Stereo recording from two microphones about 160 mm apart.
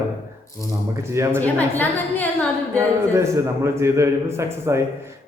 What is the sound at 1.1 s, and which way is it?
Speech, 15° right (ahead or behind).